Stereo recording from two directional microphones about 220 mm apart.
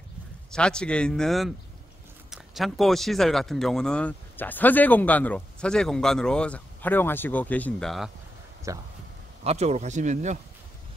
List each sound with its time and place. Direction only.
0.5 s speech: 5° left (ahead or behind)
8.7 s speech: 15° right (ahead or behind)
9.4 s speech: 30° right (ahead or behind)